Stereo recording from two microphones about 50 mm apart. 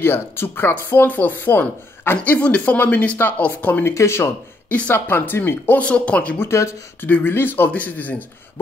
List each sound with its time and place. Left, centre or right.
0.0 s speech: left
2.2 s speech: left
3.8 s speech: left
4.6 s speech: left
5.8 s speech: left
6.5 s speech: left
7.0 s speech: left
7.7 s speech: left